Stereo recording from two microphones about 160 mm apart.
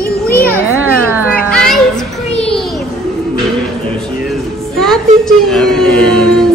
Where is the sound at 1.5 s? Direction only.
5° left (ahead or behind).